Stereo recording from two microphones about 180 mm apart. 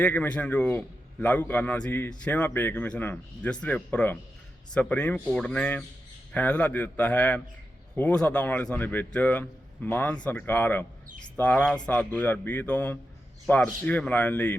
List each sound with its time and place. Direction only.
0.0 s a man's voice: 10° left (ahead or behind)